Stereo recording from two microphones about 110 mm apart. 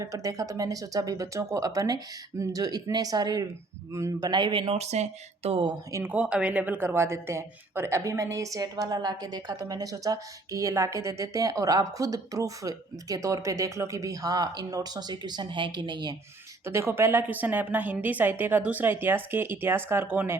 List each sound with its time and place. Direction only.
0.0 s a woman's voice: 30° right (ahead or behind)
4.3 s speech: 45° right (ahead or behind)
4.8 s speech: 80° right; by 5.7 s 55° right (ahead or behind)
5.9 s a woman's voice: 15° right (ahead or behind); by 16.1 s 40° right (ahead or behind)
16.6 s a woman's voice: 20° right (ahead or behind)